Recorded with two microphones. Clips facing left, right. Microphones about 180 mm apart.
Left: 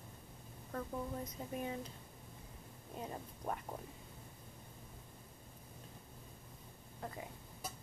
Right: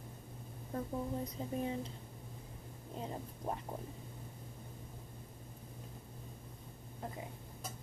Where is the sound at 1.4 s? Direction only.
25° right (ahead or behind).